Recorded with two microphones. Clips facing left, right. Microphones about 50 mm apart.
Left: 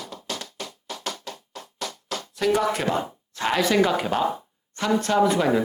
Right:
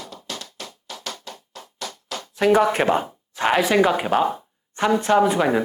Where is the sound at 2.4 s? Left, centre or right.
Right.